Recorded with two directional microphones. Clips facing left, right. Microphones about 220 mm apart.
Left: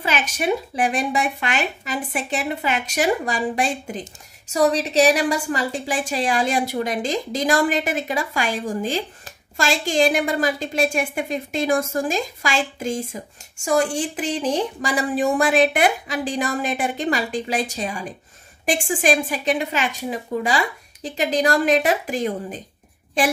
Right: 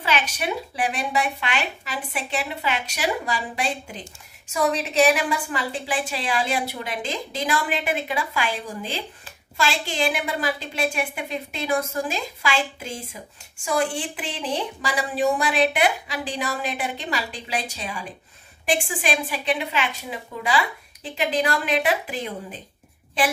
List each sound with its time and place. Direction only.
0.0 s a woman's voice: 50° left (ahead or behind)
4.5 s a woman's voice: 35° left (ahead or behind)